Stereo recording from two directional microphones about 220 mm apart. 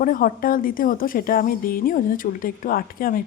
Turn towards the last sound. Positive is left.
turn(degrees=40)  # may be behind; listen again after turning